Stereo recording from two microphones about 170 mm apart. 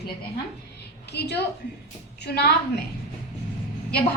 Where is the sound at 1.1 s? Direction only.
75° left (ahead or behind).